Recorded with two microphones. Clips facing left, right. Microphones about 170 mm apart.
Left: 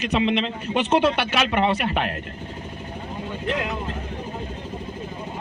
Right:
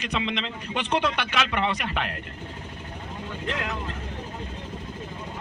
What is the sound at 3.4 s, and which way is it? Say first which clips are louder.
Speech: left 5 dB; 15° left (ahead or behind).